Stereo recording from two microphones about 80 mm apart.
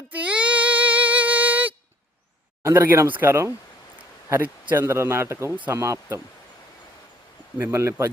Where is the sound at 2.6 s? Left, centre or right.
Right.